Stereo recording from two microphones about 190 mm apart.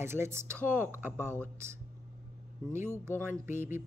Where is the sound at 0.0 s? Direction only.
15° right (ahead or behind).